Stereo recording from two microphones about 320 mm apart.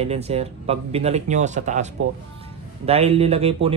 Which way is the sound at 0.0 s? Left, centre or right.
Centre.